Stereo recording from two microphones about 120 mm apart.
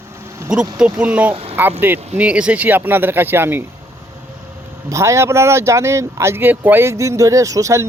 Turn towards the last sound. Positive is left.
turn(degrees=-25)  # may be behind; listen again after turning